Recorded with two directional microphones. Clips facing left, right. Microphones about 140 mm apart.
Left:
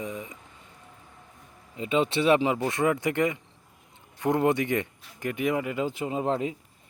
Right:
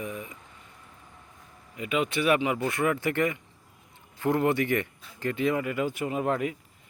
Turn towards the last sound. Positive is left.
turn(degrees=25)  # may be behind; listen again after turning